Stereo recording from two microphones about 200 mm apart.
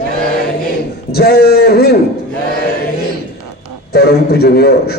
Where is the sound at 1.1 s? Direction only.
50° left (ahead or behind).